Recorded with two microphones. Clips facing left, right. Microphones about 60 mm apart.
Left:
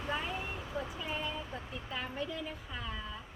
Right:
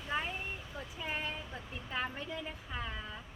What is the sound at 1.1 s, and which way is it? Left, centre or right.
Speech, right.